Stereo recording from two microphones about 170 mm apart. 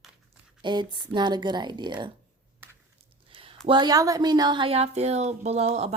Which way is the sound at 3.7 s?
25° right (ahead or behind).